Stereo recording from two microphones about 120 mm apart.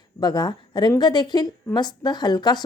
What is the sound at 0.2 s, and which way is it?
A woman's voice, 35° left (ahead or behind).